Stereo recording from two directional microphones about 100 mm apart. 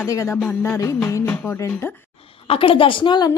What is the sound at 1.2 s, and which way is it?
Speech, 20° left (ahead or behind).